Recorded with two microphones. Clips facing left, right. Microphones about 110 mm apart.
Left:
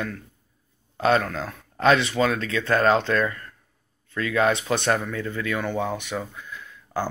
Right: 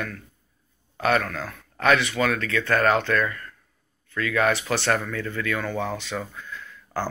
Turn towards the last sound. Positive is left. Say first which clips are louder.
# left 1 dB
turn(degrees=15)  # may be behind; listen again after turning